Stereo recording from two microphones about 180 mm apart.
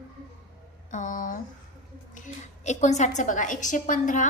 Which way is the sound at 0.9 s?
45° left (ahead or behind).